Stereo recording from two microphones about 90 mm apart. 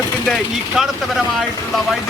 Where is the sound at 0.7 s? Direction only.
5° right (ahead or behind).